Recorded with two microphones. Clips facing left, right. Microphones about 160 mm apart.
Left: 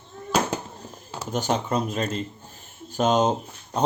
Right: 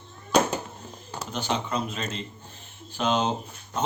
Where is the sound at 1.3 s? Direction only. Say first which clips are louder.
Left 4 dB; 45° left (ahead or behind).